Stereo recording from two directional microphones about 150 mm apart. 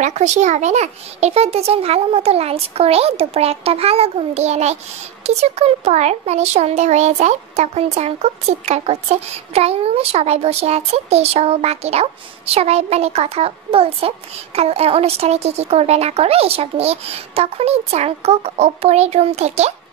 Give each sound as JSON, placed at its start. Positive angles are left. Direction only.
{"t": 0.0, "sound": "a child's voice", "side_deg": -50}